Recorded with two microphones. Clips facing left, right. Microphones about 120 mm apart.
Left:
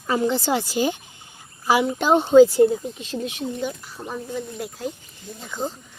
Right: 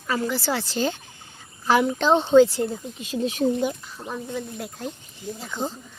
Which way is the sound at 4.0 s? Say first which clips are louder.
Left 3 dB; 10° left (ahead or behind).